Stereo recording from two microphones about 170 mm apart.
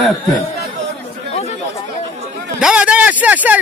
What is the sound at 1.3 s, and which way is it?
Chatter, 40° left (ahead or behind).